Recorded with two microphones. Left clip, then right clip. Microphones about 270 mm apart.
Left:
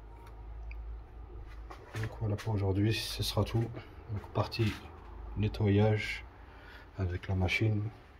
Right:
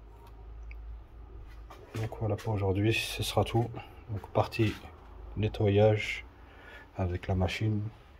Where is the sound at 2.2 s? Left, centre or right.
Centre.